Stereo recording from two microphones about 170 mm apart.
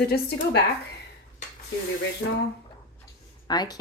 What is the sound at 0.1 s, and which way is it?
Speech, 70° left (ahead or behind).